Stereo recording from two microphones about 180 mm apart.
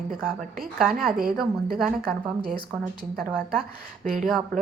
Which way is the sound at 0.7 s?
Centre (ahead or behind).